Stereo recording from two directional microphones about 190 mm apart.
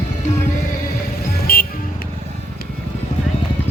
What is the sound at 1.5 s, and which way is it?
Music, 50° left (ahead or behind).